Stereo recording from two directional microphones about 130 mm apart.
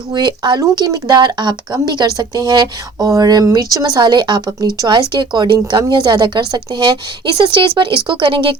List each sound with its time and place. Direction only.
0.1 s speech: 35° right (ahead or behind)